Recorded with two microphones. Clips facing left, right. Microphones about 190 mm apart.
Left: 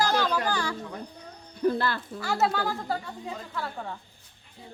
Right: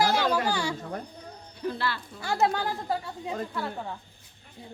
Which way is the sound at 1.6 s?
45° left (ahead or behind).